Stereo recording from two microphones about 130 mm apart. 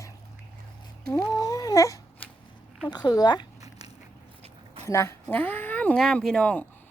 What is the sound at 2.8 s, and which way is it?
Speech, 30° left (ahead or behind).